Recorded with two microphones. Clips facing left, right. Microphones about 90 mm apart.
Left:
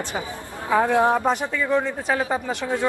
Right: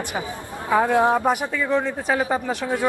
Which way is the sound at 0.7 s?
15° right (ahead or behind).